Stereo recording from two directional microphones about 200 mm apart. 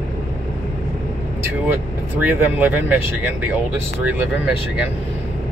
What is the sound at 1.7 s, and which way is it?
Speech, 10° right (ahead or behind).